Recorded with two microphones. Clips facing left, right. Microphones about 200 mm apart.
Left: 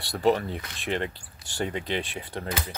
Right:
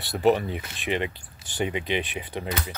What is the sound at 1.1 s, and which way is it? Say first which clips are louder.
Speech: right 1 dB; 20° right (ahead or behind).